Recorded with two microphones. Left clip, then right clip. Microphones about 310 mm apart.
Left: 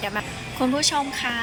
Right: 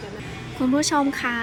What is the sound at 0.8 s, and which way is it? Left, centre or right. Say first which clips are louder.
Speech: right 4 dB; centre.